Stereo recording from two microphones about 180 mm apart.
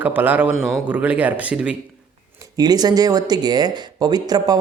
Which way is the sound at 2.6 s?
20° right (ahead or behind).